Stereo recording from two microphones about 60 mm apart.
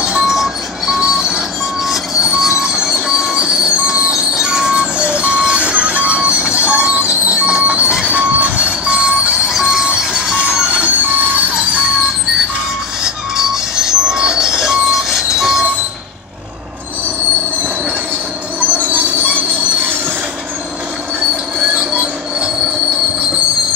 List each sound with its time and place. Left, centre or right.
0.0 s vehicle: centre
2.4 s train: centre
7.6 s music: right
8.0 s vehicle: right
13.0 s vehicle: centre
18.7 s train wheels squealing: right
21.6 s train: right